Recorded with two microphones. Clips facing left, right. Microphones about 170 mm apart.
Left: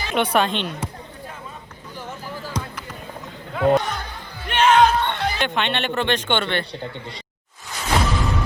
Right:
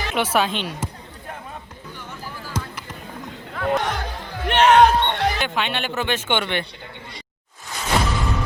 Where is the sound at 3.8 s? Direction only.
90° right; by 5.3 s 75° right (ahead or behind).